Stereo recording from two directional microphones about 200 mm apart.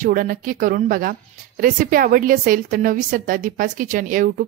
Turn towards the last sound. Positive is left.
turn(degrees=-40)  # may be behind; listen again after turning